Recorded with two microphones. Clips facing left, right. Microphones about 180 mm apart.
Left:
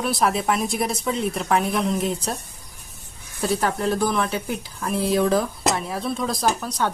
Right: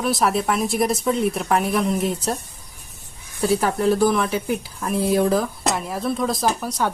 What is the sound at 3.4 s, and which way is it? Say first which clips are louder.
Speech: right 3 dB; 5° right (ahead or behind).